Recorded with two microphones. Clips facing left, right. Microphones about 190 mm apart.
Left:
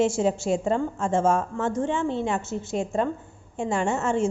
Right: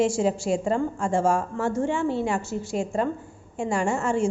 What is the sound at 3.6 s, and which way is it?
Speech, 25° left (ahead or behind).